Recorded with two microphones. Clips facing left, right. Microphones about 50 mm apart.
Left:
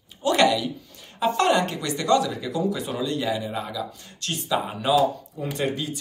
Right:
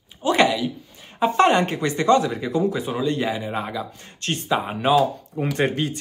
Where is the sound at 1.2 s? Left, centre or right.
Right.